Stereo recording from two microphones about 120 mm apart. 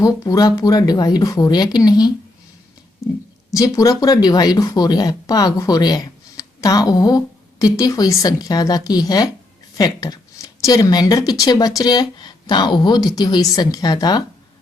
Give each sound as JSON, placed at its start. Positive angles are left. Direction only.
{"t": 0.0, "sound": "speech", "side_deg": 30}
{"t": 3.5, "sound": "speech", "side_deg": 25}